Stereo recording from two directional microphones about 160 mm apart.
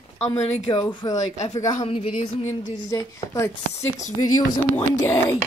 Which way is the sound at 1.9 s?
35° left (ahead or behind).